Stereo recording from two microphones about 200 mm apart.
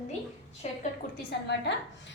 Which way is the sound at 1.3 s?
55° left (ahead or behind).